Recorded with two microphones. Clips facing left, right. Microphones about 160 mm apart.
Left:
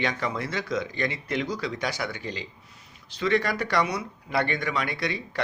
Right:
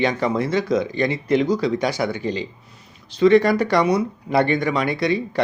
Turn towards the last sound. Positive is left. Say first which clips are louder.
# right 10 dB
turn(degrees=-25)  # may be behind; listen again after turning